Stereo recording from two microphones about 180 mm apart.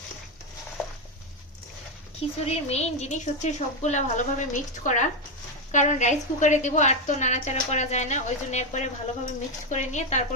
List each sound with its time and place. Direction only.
2.4 s a woman's voice: 35° left (ahead or behind)